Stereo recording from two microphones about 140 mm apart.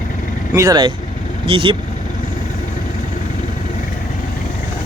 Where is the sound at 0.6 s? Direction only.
30° right (ahead or behind).